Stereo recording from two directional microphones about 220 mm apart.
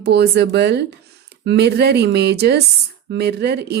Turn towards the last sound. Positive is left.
turn(degrees=-50)  # may be behind; listen again after turning